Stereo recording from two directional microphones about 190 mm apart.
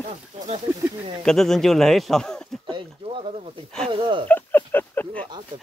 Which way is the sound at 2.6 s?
25° right (ahead or behind).